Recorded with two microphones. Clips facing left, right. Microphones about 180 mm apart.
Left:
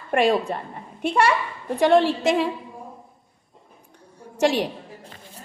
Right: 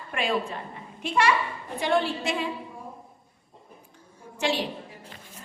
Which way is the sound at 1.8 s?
80° left.